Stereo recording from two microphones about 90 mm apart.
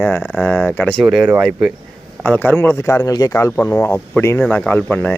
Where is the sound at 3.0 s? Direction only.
45° left (ahead or behind).